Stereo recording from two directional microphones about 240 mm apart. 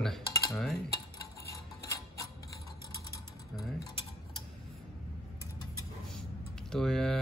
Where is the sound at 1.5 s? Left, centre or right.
Centre.